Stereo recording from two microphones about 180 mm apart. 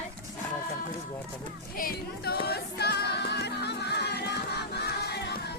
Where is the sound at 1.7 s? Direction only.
55° left (ahead or behind).